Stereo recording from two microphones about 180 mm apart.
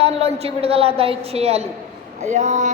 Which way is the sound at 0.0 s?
35° right (ahead or behind).